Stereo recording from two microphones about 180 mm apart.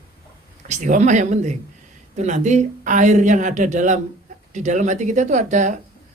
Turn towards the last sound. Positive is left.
turn(degrees=-40)  # may be behind; listen again after turning